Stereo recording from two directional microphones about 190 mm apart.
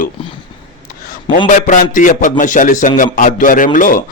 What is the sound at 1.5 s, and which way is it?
A man's voice, 40° left (ahead or behind).